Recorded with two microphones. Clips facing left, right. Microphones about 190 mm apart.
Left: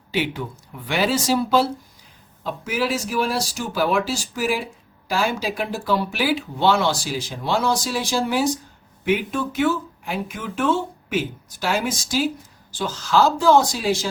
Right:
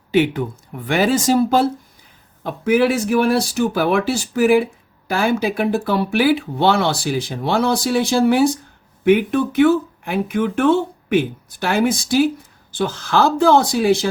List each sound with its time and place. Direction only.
0.1 s speech: 55° right (ahead or behind)